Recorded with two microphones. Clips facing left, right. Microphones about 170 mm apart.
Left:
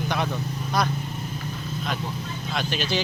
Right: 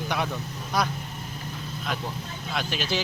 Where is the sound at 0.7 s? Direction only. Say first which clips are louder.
Left 1 dB; 10° right (ahead or behind).